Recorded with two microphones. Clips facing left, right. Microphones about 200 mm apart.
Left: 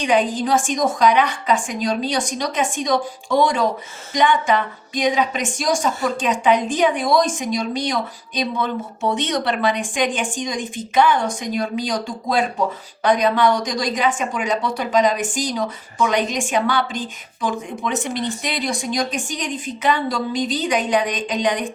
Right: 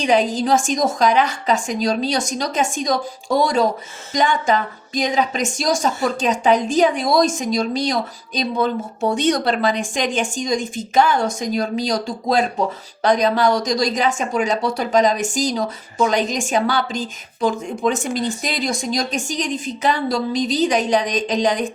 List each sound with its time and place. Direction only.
0.0 s a woman's voice: 40° right (ahead or behind)